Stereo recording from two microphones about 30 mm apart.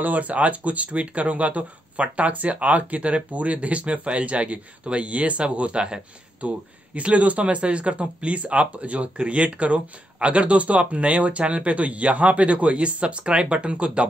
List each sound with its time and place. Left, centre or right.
0.0 s speech: right